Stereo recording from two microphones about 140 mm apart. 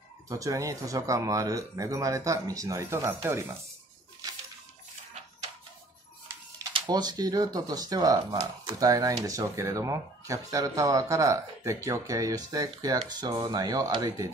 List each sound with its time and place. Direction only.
0.3 s speech: 25° right (ahead or behind)
6.7 s speech: 30° right (ahead or behind)